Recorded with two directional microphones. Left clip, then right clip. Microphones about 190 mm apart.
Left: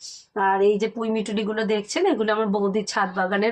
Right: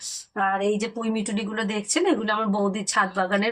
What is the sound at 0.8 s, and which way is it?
Speech, 55° left (ahead or behind).